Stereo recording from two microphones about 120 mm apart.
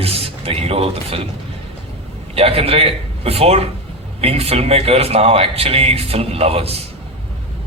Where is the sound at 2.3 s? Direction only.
55° right (ahead or behind).